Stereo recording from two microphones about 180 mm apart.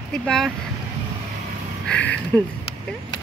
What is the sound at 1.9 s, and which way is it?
Speech, 10° left (ahead or behind).